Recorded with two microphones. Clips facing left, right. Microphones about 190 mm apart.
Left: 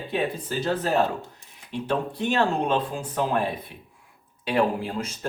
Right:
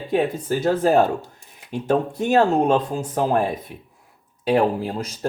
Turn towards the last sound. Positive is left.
turn(degrees=-40)  # may be behind; listen again after turning